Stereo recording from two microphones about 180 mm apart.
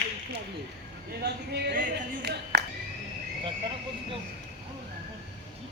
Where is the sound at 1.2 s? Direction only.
65° right (ahead or behind).